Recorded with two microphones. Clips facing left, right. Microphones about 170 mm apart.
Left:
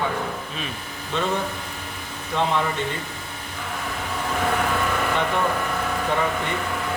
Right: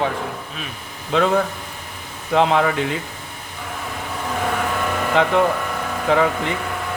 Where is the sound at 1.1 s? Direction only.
90° right.